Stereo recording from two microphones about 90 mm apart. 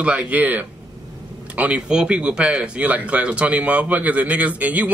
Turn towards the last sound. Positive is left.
turn(degrees=-15)  # may be behind; listen again after turning